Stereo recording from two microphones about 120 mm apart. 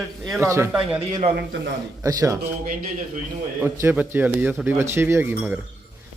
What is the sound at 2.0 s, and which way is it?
Speech, 25° right (ahead or behind).